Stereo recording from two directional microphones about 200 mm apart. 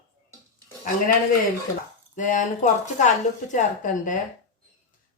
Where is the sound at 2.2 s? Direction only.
40° left (ahead or behind).